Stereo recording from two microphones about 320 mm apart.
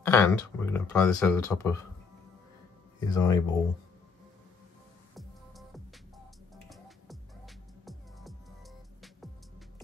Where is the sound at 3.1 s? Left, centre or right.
Centre.